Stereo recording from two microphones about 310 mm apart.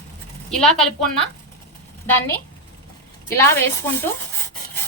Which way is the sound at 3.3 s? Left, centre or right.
Centre.